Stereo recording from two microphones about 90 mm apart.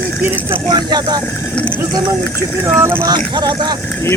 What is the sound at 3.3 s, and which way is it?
Speech, 55° right (ahead or behind).